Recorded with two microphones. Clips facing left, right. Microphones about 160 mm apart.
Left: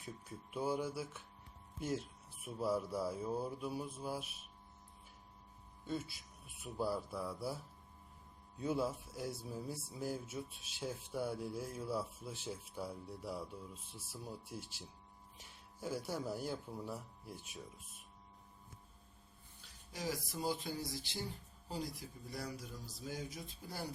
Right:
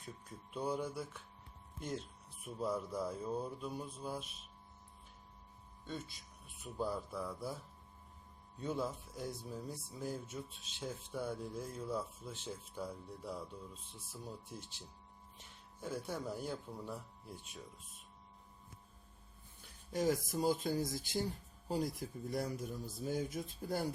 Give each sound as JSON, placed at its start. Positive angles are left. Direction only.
{"t": 0.0, "sound": "speech", "side_deg": 5}
{"t": 5.8, "sound": "a man's voice", "side_deg": 5}
{"t": 19.9, "sound": "a man's voice", "side_deg": -50}